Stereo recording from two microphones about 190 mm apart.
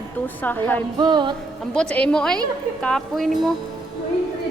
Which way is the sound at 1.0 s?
25° right (ahead or behind).